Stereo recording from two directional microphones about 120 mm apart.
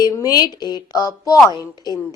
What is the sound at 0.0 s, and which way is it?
A woman's voice, 30° left (ahead or behind).